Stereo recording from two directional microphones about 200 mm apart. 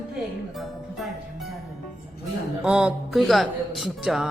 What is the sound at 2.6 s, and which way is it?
Speech, 5° right (ahead or behind).